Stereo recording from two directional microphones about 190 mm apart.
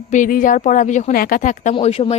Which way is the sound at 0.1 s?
45° left (ahead or behind).